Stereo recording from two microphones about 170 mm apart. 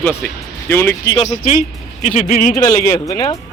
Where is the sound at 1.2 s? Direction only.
45° left (ahead or behind).